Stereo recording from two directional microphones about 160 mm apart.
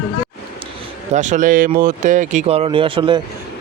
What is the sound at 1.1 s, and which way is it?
Speech, 50° right (ahead or behind).